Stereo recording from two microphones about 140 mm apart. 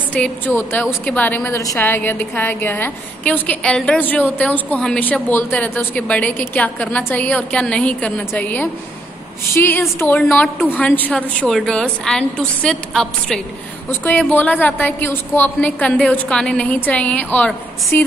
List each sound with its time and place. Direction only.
0.1 s a woman's voice: 15° left (ahead or behind)